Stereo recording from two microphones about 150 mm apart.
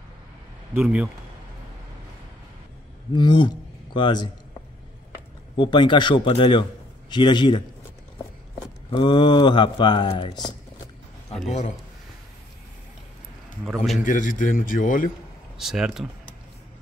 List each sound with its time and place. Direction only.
0.7 s speech: centre (ahead or behind)
3.2 s speech: 30° left (ahead or behind)
5.6 s a man's voice: 30° left (ahead or behind)
8.6 s speech: 30° left (ahead or behind)
13.7 s speech: centre (ahead or behind)
14.0 s speech: 60° left (ahead or behind)
15.5 s speech: 5° right (ahead or behind)